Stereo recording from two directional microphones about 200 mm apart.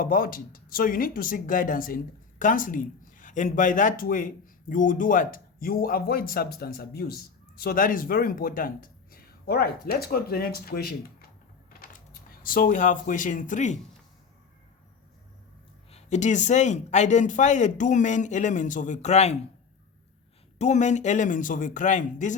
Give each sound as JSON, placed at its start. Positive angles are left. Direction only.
{"t": 0.0, "sound": "speech", "side_deg": 45}
{"t": 15.9, "sound": "speech", "side_deg": 35}
{"t": 20.6, "sound": "speech", "side_deg": 35}